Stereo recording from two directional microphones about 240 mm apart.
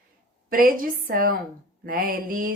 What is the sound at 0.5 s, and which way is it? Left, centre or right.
A woman's voice, right.